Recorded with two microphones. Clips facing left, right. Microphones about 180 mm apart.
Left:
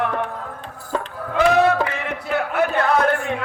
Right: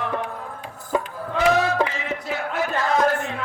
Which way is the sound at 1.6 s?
60° left (ahead or behind).